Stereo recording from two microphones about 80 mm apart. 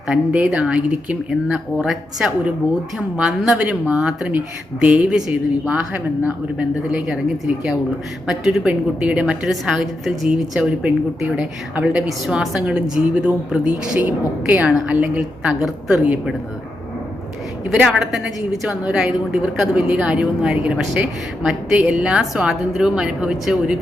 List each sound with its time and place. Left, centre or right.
0.1 s a woman's voice: centre
12.0 s a woman's voice: centre
17.7 s a woman's voice: centre